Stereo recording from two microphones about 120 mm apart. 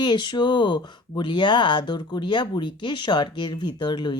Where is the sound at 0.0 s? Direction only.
40° left (ahead or behind).